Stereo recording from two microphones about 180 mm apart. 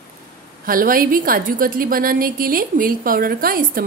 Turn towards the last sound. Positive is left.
turn(degrees=-50)  # may be behind; listen again after turning